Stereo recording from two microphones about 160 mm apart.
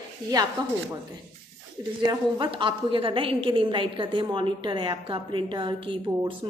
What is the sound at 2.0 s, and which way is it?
A woman's voice, 30° right (ahead or behind).